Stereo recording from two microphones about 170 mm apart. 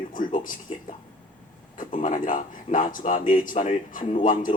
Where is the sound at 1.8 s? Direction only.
50° left (ahead or behind).